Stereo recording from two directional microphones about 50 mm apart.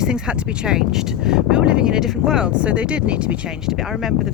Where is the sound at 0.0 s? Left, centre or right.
Centre.